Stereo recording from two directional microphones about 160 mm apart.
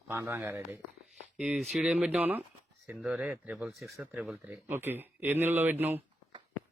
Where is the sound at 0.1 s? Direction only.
15° right (ahead or behind).